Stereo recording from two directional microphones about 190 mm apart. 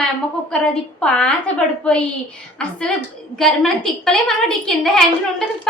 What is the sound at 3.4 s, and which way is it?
A woman's voice, centre (ahead or behind).